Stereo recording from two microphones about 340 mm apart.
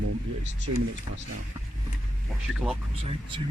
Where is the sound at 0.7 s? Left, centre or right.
Right.